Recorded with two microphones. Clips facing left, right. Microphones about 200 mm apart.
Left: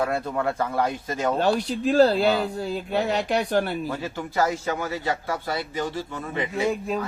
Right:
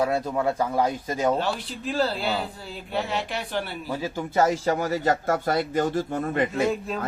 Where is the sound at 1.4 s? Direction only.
45° left (ahead or behind).